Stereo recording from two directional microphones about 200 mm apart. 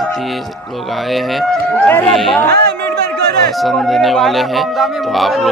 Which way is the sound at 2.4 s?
55° right (ahead or behind).